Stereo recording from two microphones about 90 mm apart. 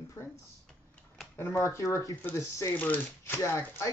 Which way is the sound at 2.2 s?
20° left (ahead or behind).